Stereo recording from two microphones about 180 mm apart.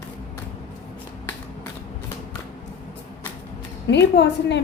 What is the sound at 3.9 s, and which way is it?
Speech, 75° left (ahead or behind).